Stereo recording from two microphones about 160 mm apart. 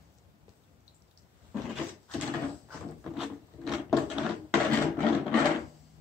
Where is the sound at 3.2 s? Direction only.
5° right (ahead or behind).